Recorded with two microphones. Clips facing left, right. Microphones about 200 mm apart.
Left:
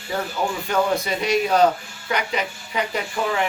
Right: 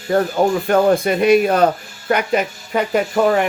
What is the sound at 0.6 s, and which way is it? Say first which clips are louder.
Speech: right 5 dB; 55° right (ahead or behind).